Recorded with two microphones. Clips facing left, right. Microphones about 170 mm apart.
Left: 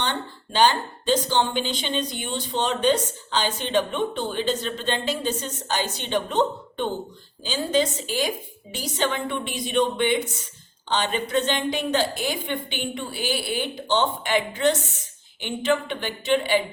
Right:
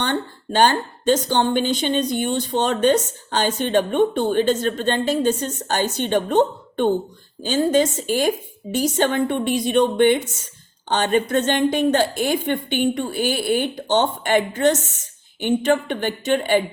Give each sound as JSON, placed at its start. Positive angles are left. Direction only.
{"t": 0.0, "sound": "a woman's voice", "side_deg": -50}